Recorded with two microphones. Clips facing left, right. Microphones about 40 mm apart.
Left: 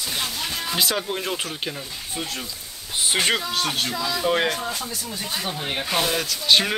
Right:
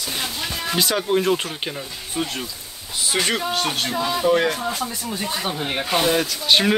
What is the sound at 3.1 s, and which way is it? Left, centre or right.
Speech, left.